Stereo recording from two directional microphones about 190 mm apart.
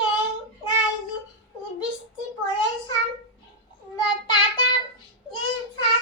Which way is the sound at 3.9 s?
25° left (ahead or behind).